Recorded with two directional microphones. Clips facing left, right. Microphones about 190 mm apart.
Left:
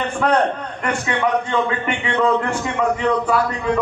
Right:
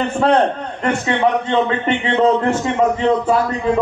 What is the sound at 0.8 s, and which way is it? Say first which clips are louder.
A man's voice: right 4 dB; 25° right (ahead or behind).